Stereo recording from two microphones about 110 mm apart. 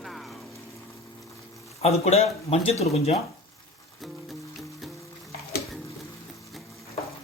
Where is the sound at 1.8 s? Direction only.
70° left (ahead or behind).